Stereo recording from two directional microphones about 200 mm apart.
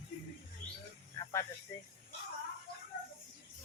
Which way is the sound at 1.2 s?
15° left (ahead or behind).